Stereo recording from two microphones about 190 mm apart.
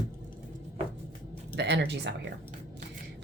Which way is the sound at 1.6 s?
65° right (ahead or behind).